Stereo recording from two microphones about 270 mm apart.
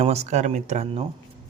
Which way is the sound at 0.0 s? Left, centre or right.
Right.